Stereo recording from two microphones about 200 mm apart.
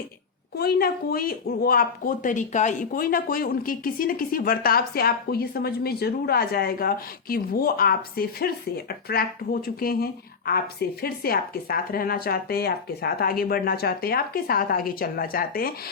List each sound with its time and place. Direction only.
0.5 s speech: 50° left (ahead or behind)